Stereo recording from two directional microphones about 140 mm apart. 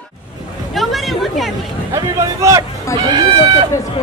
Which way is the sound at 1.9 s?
25° right (ahead or behind).